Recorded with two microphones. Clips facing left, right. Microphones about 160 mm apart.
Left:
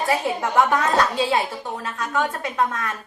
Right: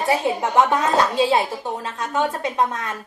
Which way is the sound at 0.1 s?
20° right (ahead or behind).